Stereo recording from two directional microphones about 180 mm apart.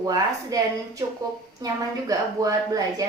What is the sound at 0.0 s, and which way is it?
A woman's voice, 20° right (ahead or behind).